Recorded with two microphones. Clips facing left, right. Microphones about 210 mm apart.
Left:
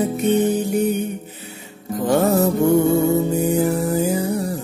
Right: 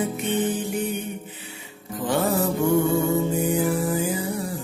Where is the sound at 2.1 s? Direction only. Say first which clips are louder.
Left 6 dB; 40° left (ahead or behind).